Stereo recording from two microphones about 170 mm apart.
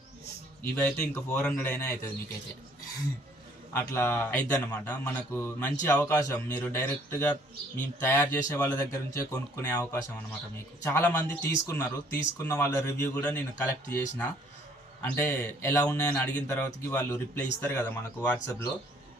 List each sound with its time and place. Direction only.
0.6 s speech: 10° left (ahead or behind)
3.7 s speech: 15° left (ahead or behind)
15.0 s speech: 10° left (ahead or behind)